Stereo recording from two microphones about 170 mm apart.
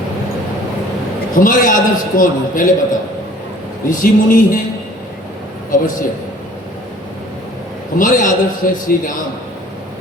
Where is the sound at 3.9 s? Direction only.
50° left (ahead or behind).